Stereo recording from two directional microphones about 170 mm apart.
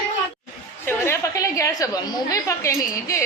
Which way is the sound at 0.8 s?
15° left (ahead or behind).